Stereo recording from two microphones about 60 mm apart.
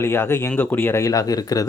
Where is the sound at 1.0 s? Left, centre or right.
Left.